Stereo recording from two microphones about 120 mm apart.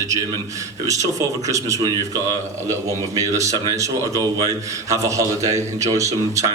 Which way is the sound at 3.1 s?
25° right (ahead or behind).